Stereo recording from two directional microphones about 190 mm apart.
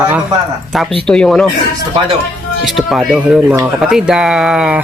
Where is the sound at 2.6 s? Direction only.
Centre (ahead or behind).